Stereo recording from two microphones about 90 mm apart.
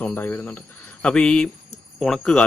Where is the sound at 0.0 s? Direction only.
20° left (ahead or behind).